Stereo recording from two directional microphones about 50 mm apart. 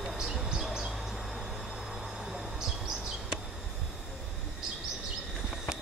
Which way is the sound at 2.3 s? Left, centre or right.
Centre.